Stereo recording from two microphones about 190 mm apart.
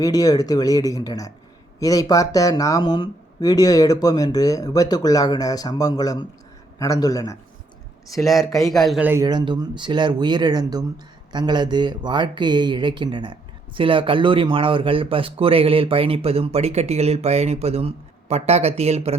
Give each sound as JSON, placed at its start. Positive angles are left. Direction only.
{"t": 0.0, "sound": "a man's voice", "side_deg": 20}
{"t": 8.2, "sound": "a man's voice", "side_deg": 0}
{"t": 9.2, "sound": "speech", "side_deg": -25}